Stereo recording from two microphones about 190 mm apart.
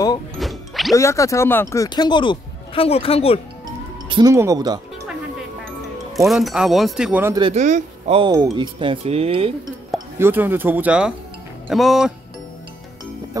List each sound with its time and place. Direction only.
0.4 s music: centre (ahead or behind)
0.9 s speech: 15° left (ahead or behind)
4.1 s speech: 20° right (ahead or behind)
6.1 s speech: centre (ahead or behind)
7.5 s speech: 40° right (ahead or behind)
8.2 s speech: 20° right (ahead or behind)
9.9 s speech: 15° right (ahead or behind)